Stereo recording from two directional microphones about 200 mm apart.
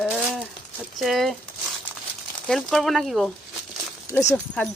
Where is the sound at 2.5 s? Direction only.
Centre (ahead or behind).